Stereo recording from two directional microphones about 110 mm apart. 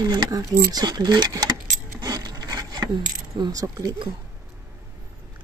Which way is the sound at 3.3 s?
40° right (ahead or behind).